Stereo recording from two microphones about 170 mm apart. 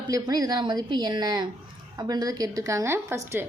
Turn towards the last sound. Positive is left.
turn(degrees=-15)  # may be behind; listen again after turning